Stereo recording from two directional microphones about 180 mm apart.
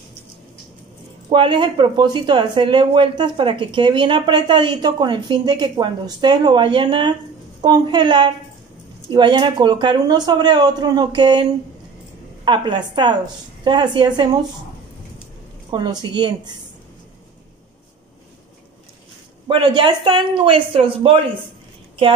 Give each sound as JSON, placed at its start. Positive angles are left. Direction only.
{"t": 1.3, "sound": "speech", "side_deg": -25}
{"t": 12.4, "sound": "speech", "side_deg": -25}
{"t": 15.7, "sound": "speech", "side_deg": -25}
{"t": 19.4, "sound": "speech", "side_deg": -25}